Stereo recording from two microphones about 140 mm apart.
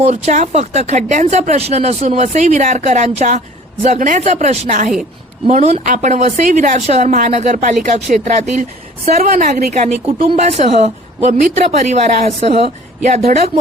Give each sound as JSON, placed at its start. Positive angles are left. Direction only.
{"t": 0.0, "sound": "speech", "side_deg": -60}
{"t": 9.1, "sound": "a woman's voice", "side_deg": -90}
{"t": 10.1, "sound": "a woman's voice", "side_deg": -45}